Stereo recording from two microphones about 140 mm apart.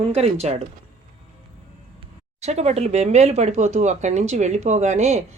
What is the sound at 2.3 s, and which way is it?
Speech, 50° right (ahead or behind).